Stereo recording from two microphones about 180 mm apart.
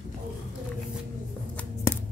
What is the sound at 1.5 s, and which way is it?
Scissors, 10° left (ahead or behind).